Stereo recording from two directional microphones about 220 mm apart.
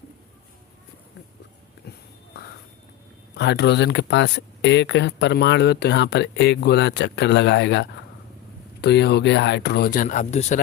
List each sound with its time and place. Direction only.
3.3 s speech: 50° left (ahead or behind); by 10.6 s 35° left (ahead or behind)